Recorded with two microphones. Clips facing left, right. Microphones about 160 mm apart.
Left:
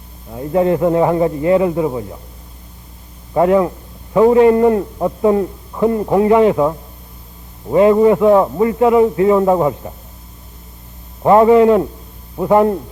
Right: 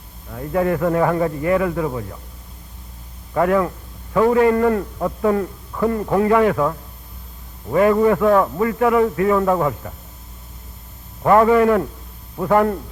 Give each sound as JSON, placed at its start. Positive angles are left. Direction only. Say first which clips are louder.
{"t": 0.3, "sound": "a man's voice", "louder": "left 5 dB", "side_deg": 20}
{"t": 3.3, "sound": "a man's voice", "louder": "left 5 dB", "side_deg": 20}
{"t": 11.2, "sound": "a man's voice", "louder": "left 4 dB", "side_deg": 20}